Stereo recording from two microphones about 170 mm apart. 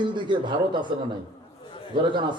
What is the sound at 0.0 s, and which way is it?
Speech, 25° right (ahead or behind).